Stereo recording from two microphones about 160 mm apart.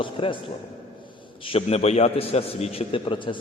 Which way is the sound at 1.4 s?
35° left (ahead or behind).